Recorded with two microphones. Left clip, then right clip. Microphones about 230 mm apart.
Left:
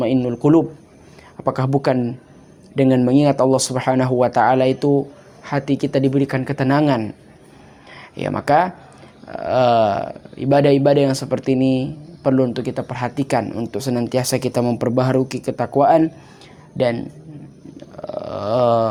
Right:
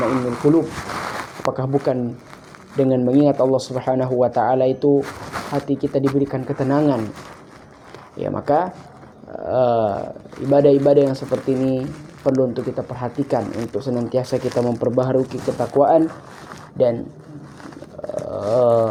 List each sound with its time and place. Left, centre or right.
1.5 s speech: left
8.1 s speech: left
18.3 s a sound: left